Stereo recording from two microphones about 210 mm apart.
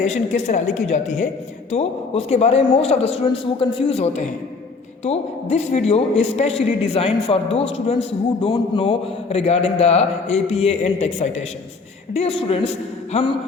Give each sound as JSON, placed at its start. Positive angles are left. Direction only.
{"t": 0.0, "sound": "a woman's voice", "side_deg": 35}